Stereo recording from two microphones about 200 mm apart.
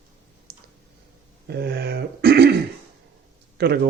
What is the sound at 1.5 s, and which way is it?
Throat clearing, 55° right (ahead or behind).